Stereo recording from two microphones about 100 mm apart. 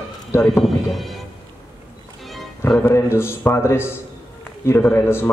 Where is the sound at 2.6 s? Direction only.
25° left (ahead or behind).